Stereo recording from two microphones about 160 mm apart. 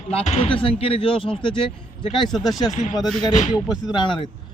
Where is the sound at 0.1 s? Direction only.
40° left (ahead or behind).